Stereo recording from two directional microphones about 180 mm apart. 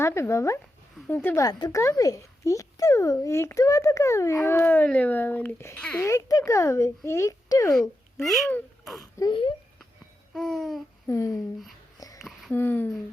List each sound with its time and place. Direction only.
0.0 s a child's voice: 15° left (ahead or behind)
8.2 s babbling: centre (ahead or behind)
8.8 s speech: centre (ahead or behind)
9.1 s speech: 25° left (ahead or behind)
10.3 s babbling: centre (ahead or behind)
11.1 s a child's voice: 15° left (ahead or behind)
11.9 s a sound: 20° left (ahead or behind)
12.2 s a sound: centre (ahead or behind)
12.5 s a child's voice: 10° left (ahead or behind)